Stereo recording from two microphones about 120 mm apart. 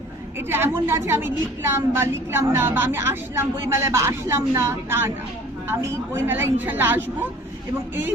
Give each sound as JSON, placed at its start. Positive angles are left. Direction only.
{"t": 0.3, "sound": "a woman's voice", "side_deg": -20}